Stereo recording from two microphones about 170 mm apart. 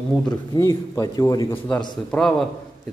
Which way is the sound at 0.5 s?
20° left (ahead or behind).